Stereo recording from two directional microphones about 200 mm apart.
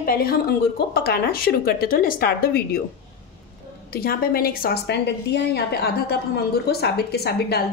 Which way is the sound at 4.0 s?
50° left (ahead or behind).